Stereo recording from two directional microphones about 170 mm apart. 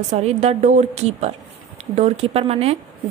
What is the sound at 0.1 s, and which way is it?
A woman's voice, 40° right (ahead or behind).